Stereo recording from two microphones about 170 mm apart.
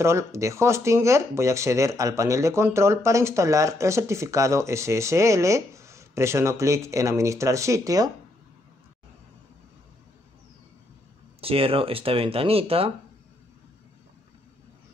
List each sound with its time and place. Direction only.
0.0 s speech: 15° right (ahead or behind)
11.4 s speech: 35° right (ahead or behind)